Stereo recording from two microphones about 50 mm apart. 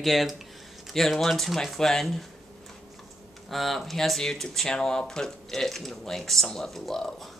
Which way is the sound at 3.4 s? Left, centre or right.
Centre.